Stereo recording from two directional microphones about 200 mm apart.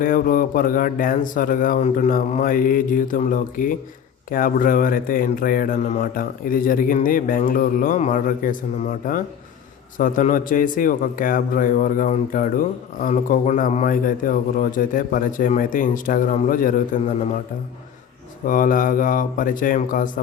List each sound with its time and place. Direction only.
0.0 s a man's voice: 45° left (ahead or behind)
18.4 s a man's voice: 45° left (ahead or behind)